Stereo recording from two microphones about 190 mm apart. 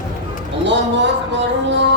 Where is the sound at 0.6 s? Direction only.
70° right (ahead or behind).